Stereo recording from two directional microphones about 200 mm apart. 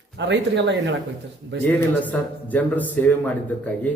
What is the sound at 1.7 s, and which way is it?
A man's voice, 10° left (ahead or behind).